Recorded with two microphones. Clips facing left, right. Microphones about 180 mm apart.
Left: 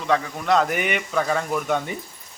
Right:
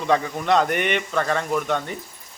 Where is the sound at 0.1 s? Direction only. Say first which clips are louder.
Right 1 dB; centre (ahead or behind).